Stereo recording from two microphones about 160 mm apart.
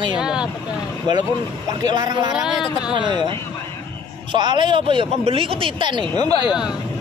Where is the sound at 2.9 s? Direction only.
30° right (ahead or behind).